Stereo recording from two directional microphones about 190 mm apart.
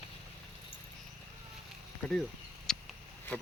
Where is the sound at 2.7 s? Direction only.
5° left (ahead or behind).